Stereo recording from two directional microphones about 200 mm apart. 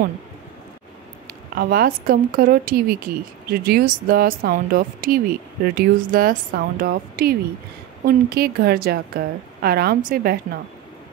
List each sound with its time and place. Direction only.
1.6 s a woman's voice: 45° right (ahead or behind)